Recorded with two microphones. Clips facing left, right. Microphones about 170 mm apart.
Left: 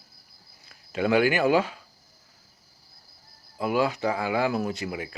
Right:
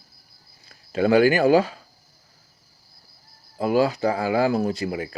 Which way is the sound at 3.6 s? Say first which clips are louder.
Right 5 dB; 35° right (ahead or behind).